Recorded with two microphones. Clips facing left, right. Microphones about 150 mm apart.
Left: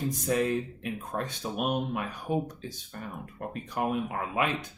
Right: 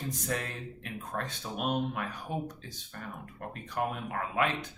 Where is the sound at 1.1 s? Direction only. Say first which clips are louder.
Left 2 dB; 15° left (ahead or behind).